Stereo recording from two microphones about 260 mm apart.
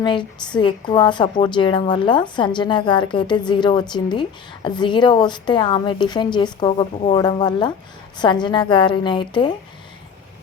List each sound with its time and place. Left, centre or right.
0.0 s a woman's voice: centre